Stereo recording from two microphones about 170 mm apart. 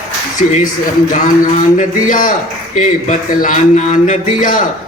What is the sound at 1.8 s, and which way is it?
A man's voice, 50° left (ahead or behind).